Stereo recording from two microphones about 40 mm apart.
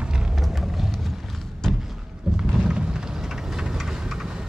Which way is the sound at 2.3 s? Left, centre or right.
Centre.